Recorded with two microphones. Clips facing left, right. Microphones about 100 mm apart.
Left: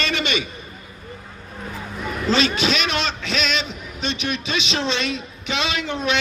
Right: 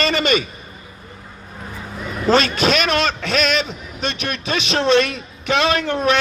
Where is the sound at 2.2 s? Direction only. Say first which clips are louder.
Right 4 dB; 45° right (ahead or behind).